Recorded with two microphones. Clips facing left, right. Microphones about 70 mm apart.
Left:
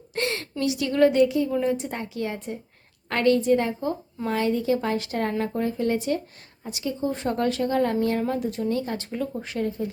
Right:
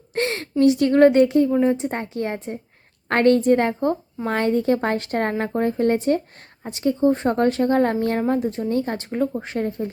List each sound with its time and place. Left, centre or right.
0.1 s a sound: right
0.6 s a woman's voice: right
1.5 s a woman's voice: right
8.2 s a woman's voice: right